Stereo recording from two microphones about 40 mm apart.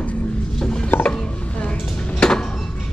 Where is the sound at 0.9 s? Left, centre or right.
Left.